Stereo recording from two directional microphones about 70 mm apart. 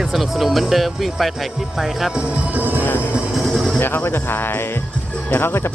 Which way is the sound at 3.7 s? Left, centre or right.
Left.